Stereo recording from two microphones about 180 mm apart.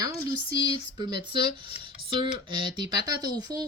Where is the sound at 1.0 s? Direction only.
25° right (ahead or behind).